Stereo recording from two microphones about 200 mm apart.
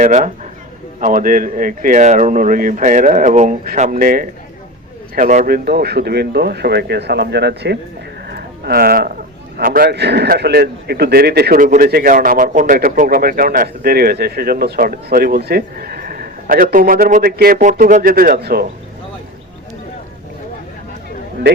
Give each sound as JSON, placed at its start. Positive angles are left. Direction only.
{"t": 0.0, "sound": "speech", "side_deg": -35}
{"t": 8.3, "sound": "a sound", "side_deg": -55}
{"t": 9.6, "sound": "a man's voice", "side_deg": -45}